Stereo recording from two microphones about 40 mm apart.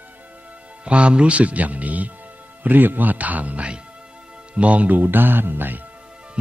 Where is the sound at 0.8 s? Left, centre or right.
Right.